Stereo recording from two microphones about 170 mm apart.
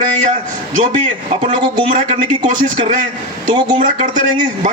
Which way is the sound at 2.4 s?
50° right (ahead or behind).